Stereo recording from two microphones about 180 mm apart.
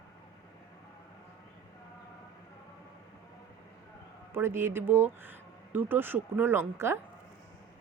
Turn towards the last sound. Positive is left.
turn(degrees=-15)  # may be behind; listen again after turning